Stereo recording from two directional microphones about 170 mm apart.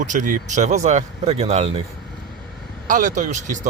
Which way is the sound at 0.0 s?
50° right (ahead or behind).